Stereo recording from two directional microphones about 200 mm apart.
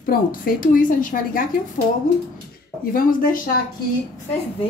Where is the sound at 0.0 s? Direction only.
45° left (ahead or behind).